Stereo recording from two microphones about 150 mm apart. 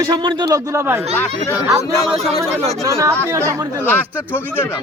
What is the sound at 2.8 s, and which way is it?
Speech, 20° right (ahead or behind).